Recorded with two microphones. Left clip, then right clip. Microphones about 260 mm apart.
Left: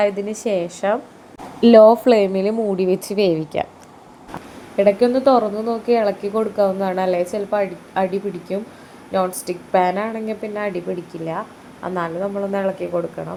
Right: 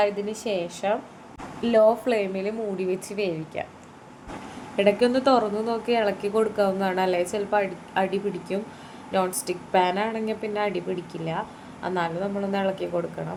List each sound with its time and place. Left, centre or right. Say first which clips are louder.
0.0 s a woman's voice: left 5 dB; left
4.8 s speech: left 6 dB; centre